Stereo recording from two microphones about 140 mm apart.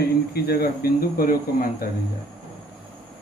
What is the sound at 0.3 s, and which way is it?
Speech, 90° left.